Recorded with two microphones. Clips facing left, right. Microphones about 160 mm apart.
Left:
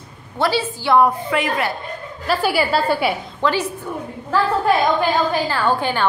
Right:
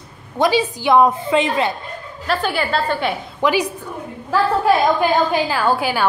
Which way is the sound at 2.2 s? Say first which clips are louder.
Left 2 dB; 5° left (ahead or behind).